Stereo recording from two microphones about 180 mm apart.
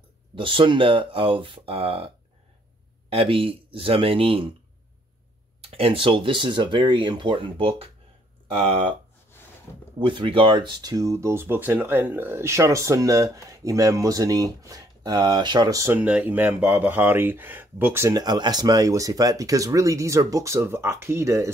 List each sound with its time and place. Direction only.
0.4 s speech: 30° right (ahead or behind)
5.6 s speech: 30° right (ahead or behind)
9.9 s speech: 25° right (ahead or behind)